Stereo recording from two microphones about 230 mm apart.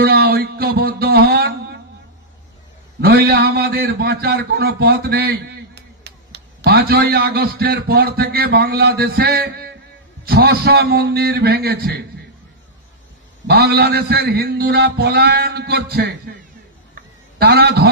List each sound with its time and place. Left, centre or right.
0.0 s music: right
3.0 s a man's voice: right
13.5 s a man's voice: right
16.9 s a sound: right